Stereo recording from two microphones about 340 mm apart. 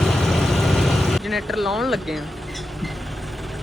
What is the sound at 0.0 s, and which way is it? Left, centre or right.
Vehicle, centre.